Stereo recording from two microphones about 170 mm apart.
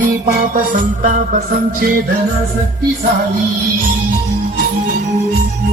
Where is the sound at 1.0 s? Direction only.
50° right (ahead or behind).